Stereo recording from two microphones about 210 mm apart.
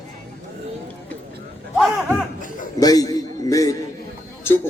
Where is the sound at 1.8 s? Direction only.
Centre (ahead or behind).